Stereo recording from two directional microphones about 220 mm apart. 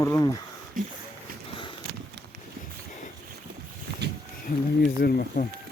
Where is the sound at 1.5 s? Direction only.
20° left (ahead or behind).